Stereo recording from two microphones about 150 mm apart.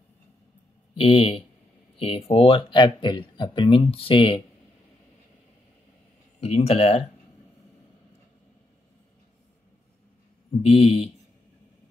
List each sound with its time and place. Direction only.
0.9 s speech: 40° left (ahead or behind)
6.4 s speech: 45° left (ahead or behind)
10.6 s speech: 40° left (ahead or behind)